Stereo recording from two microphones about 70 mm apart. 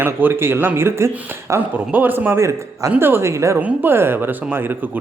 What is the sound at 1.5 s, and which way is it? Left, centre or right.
Speech, right.